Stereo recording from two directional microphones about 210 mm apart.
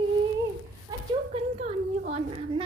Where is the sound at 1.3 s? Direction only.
30° right (ahead or behind).